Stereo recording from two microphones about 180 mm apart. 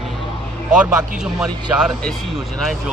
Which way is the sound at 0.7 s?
5° right (ahead or behind).